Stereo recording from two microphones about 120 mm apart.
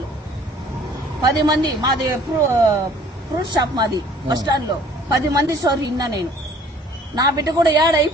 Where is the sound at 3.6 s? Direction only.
35° right (ahead or behind).